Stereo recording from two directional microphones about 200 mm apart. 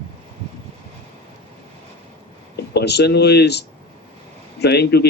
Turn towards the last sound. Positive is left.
turn(degrees=55)  # may be behind; listen again after turning